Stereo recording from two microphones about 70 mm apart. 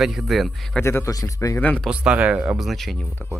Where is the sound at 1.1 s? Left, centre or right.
Left.